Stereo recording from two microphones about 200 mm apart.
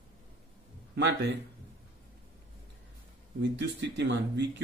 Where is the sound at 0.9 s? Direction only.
60° right (ahead or behind).